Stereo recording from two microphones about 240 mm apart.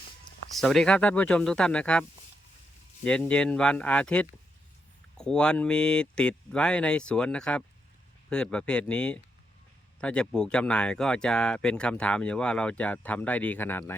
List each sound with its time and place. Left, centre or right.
0.6 s speech: centre